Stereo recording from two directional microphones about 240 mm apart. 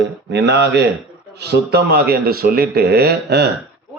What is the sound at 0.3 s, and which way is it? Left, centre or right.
A man's voice, right.